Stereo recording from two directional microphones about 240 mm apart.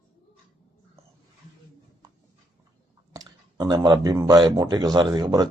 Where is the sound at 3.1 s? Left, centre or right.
Centre.